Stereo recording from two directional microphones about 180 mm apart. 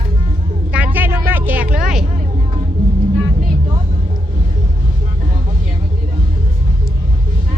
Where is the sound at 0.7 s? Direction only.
10° right (ahead or behind).